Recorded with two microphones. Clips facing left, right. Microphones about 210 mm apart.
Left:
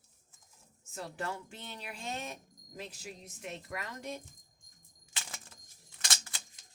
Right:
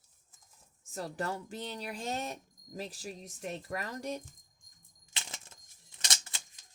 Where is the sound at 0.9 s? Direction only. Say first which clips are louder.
Right 3 dB; 40° right (ahead or behind).